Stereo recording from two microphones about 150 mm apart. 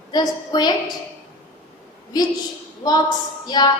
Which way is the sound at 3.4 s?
30° left (ahead or behind).